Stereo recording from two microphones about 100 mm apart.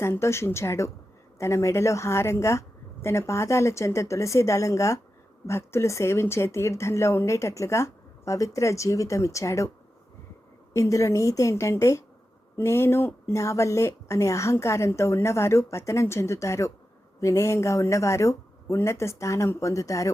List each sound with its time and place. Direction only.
0.0 s speech: 25° left (ahead or behind)
10.8 s speech: 30° left (ahead or behind)